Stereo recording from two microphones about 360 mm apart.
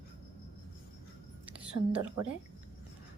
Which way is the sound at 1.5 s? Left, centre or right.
Centre.